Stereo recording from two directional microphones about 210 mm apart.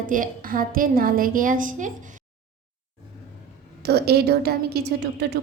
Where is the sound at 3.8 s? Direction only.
50° right (ahead or behind).